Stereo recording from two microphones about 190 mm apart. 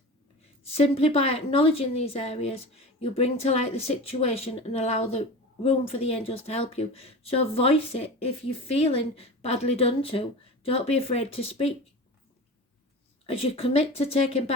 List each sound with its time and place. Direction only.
0.7 s speech: 30° left (ahead or behind)
13.2 s speech: 30° left (ahead or behind)